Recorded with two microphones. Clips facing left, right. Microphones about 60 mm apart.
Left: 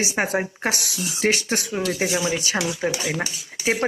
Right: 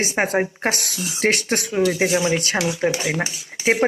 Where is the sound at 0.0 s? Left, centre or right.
Right.